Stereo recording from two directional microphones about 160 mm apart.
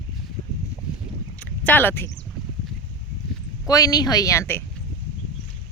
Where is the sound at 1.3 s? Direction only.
10° left (ahead or behind).